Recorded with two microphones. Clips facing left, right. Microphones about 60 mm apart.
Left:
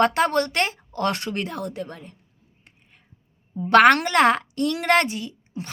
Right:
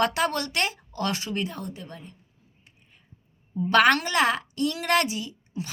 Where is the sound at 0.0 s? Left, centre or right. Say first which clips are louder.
Left 5 dB; left.